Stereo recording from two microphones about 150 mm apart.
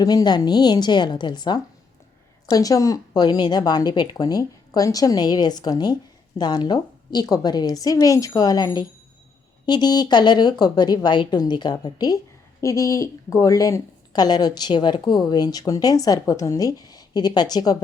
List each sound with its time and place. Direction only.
0.0 s a woman's voice: 25° left (ahead or behind)